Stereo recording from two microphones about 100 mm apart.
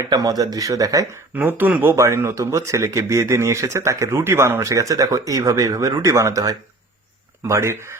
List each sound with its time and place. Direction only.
0.0 s speech: 40° right (ahead or behind)
1.4 s speech: 15° right (ahead or behind)